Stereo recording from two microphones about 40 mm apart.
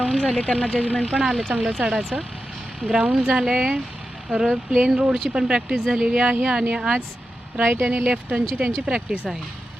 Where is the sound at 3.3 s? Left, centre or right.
Centre.